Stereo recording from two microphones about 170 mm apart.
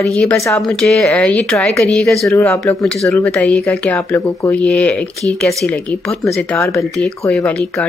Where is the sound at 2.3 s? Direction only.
15° left (ahead or behind).